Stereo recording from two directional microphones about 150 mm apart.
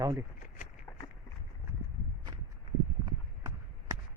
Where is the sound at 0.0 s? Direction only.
20° right (ahead or behind).